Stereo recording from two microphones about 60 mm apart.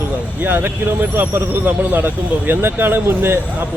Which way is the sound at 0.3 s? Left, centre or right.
Right.